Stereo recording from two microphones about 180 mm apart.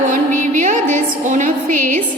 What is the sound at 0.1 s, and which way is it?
Music, 45° right (ahead or behind).